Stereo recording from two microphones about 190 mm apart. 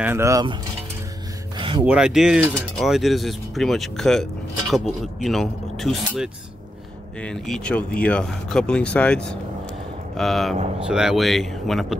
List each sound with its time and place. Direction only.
0.0 s speech: 15° right (ahead or behind)
1.6 s a sound: 25° right (ahead or behind)
1.9 s speech: 5° right (ahead or behind)